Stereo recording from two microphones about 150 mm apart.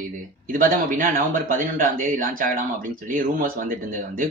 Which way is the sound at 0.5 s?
65° right (ahead or behind).